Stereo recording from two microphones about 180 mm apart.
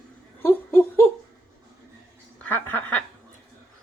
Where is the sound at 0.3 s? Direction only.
10° left (ahead or behind).